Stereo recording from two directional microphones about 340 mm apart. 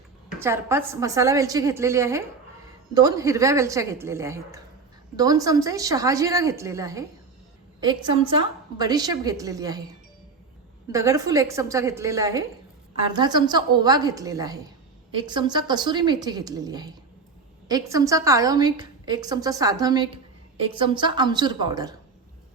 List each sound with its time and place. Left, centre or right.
0.3 s a woman's voice: centre
10.9 s a woman's voice: centre